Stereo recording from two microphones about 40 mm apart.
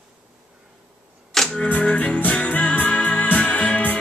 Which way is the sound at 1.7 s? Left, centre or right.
Left.